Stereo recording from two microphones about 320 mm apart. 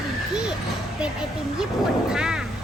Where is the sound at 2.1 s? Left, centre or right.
Centre.